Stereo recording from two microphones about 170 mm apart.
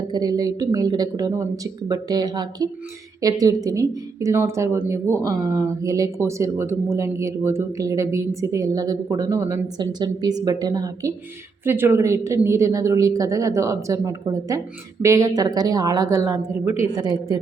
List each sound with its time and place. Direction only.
0.1 s a woman's voice: 20° right (ahead or behind)